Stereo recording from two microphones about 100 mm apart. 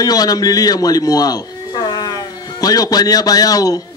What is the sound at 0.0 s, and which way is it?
A man's voice, 40° left (ahead or behind).